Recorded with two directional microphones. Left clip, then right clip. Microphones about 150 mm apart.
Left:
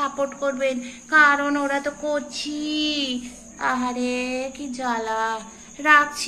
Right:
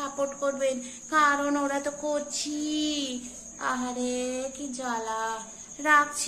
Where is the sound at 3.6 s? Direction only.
5° left (ahead or behind).